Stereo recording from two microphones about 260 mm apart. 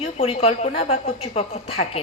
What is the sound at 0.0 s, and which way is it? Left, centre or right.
A woman's voice, left.